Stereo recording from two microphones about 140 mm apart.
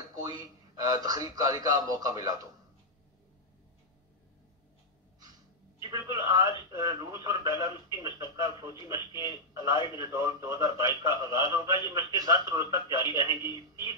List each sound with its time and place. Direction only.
0.1 s a man's voice: 25° right (ahead or behind)
5.8 s a man's voice: 25° right (ahead or behind)
9.3 s a man's voice: 25° right (ahead or behind)